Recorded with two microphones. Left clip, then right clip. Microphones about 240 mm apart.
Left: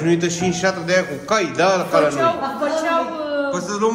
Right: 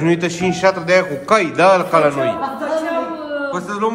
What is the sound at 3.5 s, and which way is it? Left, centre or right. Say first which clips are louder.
Speech: right 3 dB; centre.